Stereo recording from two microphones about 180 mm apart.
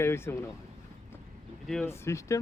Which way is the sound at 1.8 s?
15° left (ahead or behind).